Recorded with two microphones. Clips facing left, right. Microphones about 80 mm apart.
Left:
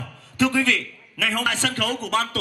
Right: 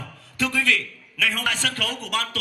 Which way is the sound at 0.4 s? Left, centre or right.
Left.